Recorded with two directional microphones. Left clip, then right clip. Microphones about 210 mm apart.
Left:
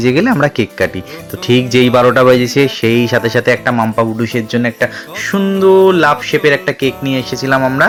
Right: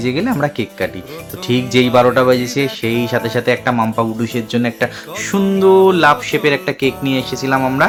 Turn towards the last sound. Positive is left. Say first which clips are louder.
# left 3 dB
turn(degrees=10)  # may be behind; listen again after turning